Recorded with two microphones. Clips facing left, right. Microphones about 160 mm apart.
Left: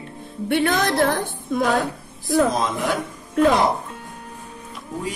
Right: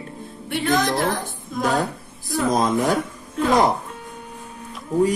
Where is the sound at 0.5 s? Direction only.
60° left (ahead or behind).